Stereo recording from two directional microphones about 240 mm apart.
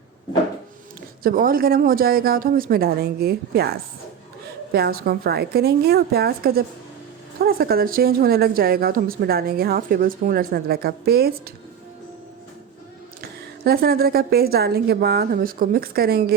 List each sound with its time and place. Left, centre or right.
1.2 s a woman's voice: right
13.2 s a woman's voice: right